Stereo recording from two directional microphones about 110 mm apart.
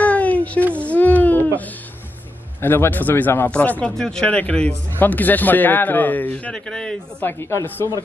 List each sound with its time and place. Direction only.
0.0 s a sound: 15° left (ahead or behind)
2.6 s speech: 20° left (ahead or behind)
7.2 s speech: 25° left (ahead or behind)